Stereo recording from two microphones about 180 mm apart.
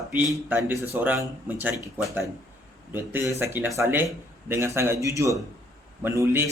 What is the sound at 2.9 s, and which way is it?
Speech, 10° right (ahead or behind).